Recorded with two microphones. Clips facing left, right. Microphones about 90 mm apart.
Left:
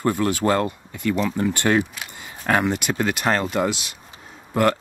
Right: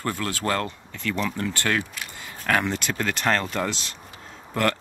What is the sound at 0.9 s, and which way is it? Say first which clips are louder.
Speech: left 4 dB; 10° left (ahead or behind).